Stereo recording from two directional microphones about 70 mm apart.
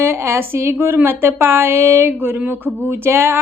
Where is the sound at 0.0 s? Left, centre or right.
Right.